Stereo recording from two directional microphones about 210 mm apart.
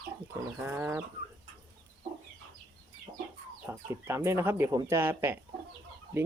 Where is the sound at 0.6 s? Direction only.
10° right (ahead or behind).